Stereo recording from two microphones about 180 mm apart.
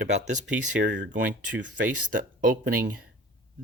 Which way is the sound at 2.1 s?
50° right (ahead or behind).